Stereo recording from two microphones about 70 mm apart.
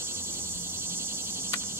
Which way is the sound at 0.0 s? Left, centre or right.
Right.